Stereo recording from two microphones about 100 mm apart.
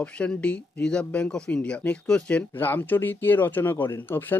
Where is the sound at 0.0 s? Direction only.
10° left (ahead or behind).